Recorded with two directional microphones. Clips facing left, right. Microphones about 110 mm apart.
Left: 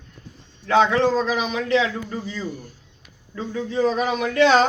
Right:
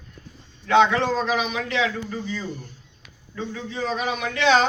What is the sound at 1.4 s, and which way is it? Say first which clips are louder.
Speech: left 3 dB; 35° left (ahead or behind).